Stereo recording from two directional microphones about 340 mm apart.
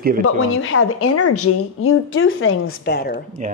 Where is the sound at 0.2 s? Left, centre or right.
Left.